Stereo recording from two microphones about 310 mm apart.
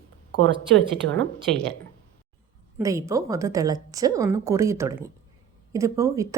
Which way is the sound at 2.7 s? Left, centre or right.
Centre.